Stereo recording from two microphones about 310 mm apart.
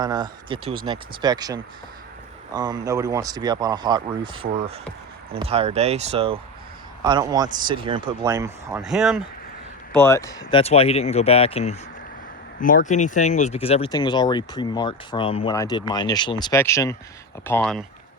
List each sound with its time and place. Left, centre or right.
0.0 s speech: centre
10.0 s speech: centre